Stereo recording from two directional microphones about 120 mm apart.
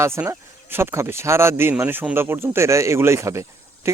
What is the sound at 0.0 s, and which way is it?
A man's voice, 20° right (ahead or behind).